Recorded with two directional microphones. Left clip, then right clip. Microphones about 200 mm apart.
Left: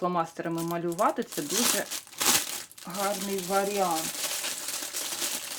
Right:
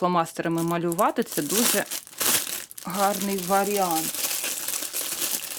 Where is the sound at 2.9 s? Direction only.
50° right (ahead or behind).